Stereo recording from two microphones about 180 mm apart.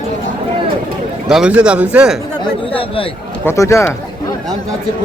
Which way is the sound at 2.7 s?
30° left (ahead or behind).